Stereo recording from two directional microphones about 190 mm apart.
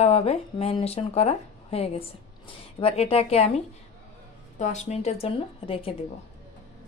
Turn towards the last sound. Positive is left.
turn(degrees=30)  # may be behind; listen again after turning